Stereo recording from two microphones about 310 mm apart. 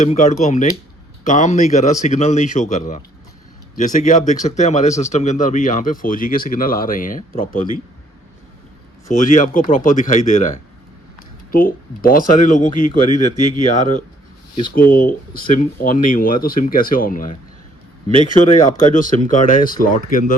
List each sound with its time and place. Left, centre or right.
0.0 s speech: left
9.0 s speech: left
11.5 s speech: left
18.5 s speech: left